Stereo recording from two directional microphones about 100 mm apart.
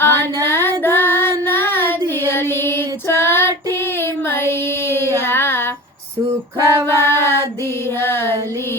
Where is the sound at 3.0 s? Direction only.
25° left (ahead or behind).